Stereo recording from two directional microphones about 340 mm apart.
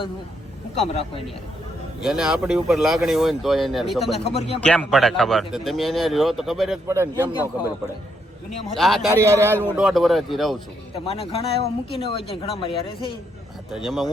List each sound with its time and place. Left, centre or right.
0.8 s speech: centre
2.0 s speech: centre
4.4 s speech: centre
4.6 s speech: centre
8.4 s a man's voice: centre
10.9 s speech: centre
13.7 s speech: centre